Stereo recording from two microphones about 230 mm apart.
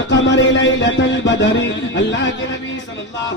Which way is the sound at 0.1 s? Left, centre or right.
Left.